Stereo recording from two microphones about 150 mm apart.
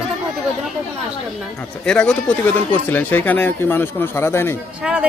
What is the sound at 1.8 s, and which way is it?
Speech, 5° left (ahead or behind).